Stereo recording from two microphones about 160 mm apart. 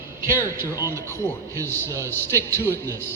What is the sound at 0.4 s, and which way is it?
A man's voice, 20° left (ahead or behind).